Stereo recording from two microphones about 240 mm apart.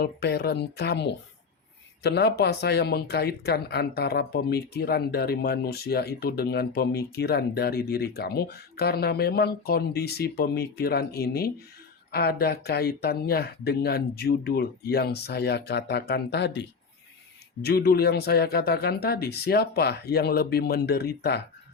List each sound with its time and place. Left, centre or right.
0.0 s speech: left